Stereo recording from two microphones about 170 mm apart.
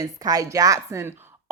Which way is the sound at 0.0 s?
20° right (ahead or behind).